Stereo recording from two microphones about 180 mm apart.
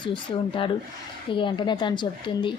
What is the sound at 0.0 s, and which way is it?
Speech, 25° left (ahead or behind).